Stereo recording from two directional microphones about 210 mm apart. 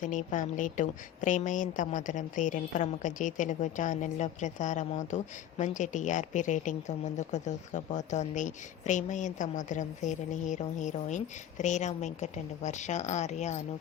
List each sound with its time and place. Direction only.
0.0 s speech: 35° left (ahead or behind)